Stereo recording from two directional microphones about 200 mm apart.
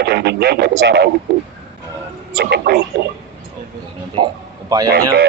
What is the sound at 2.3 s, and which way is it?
Speech, 50° right (ahead or behind).